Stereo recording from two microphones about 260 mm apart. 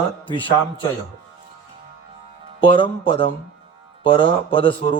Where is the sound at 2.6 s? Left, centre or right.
Centre.